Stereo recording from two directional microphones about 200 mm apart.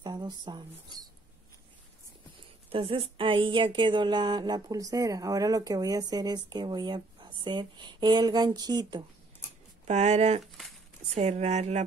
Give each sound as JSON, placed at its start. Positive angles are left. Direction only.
{"t": 0.0, "sound": "speech", "side_deg": -20}
{"t": 2.7, "sound": "speech", "side_deg": -25}
{"t": 9.8, "sound": "speech", "side_deg": -35}
{"t": 10.4, "sound": "a sound", "side_deg": 0}
{"t": 11.1, "sound": "speech", "side_deg": -35}